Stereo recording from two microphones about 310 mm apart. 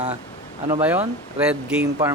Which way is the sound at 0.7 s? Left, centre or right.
Centre.